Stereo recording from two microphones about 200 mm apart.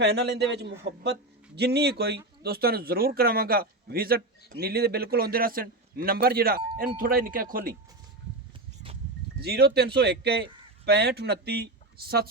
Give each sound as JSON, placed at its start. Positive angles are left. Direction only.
{"t": 0.0, "sound": "a man's voice", "side_deg": -55}
{"t": 9.4, "sound": "speech", "side_deg": -55}